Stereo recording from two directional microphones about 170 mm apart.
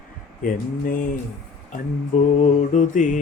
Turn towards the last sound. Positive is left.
turn(degrees=45)  # may be behind; listen again after turning